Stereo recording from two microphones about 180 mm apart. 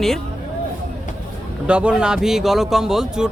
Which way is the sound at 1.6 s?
5° right (ahead or behind).